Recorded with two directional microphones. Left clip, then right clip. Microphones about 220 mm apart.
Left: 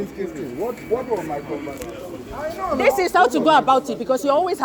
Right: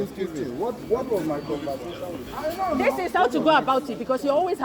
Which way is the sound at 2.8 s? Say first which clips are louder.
Left 7 dB; 20° left (ahead or behind).